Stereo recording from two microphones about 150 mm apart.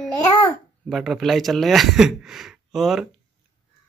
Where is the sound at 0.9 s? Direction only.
Centre (ahead or behind).